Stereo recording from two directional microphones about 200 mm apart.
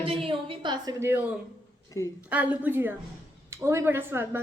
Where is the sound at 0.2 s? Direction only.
25° right (ahead or behind).